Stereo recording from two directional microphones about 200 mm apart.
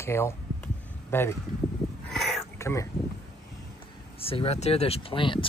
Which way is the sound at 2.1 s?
Centre (ahead or behind).